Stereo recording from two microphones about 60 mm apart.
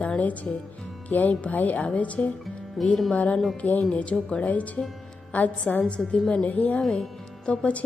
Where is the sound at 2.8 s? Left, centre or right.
Centre.